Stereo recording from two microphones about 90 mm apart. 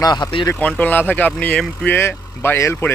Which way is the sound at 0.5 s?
15° left (ahead or behind).